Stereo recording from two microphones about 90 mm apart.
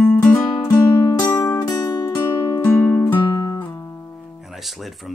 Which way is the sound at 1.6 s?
50° left (ahead or behind).